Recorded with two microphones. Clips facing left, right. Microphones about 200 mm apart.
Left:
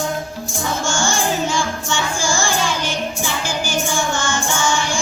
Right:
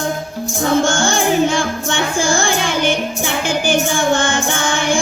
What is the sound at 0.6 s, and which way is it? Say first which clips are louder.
Music: right 7 dB; 60° right (ahead or behind).